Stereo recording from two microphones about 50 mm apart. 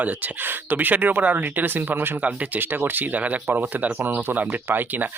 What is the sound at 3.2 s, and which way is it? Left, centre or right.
Speech, right.